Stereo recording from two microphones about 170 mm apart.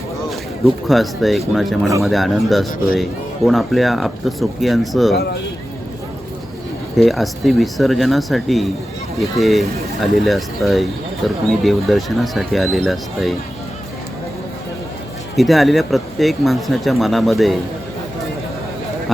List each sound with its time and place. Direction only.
0.3 s speech: centre (ahead or behind)
5.1 s speech: 75° left (ahead or behind)
6.9 s speech: centre (ahead or behind)
15.4 s speech: centre (ahead or behind)